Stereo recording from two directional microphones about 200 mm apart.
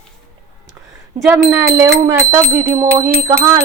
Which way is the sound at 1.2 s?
5° right (ahead or behind).